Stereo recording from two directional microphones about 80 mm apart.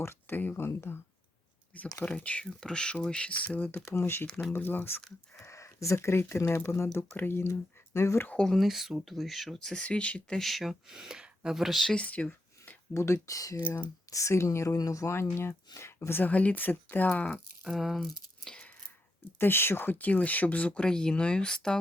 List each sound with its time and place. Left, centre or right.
0.0 s speech: left
1.7 s speech: centre
3.8 s speech: left
5.4 s speech: left
8.3 s speech: centre
8.5 s speech: centre
11.9 s a sound: centre
12.9 s speech: left; by 17.4 s centre
17.6 s speech: centre
18.4 s a sound: centre
19.4 s speech: left; by 21.8 s centre